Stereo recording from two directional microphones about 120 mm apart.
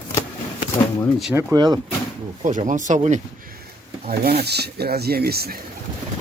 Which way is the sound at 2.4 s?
90° right.